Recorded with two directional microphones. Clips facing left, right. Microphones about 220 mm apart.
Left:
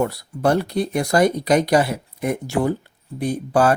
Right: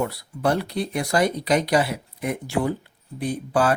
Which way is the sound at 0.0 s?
45° left (ahead or behind).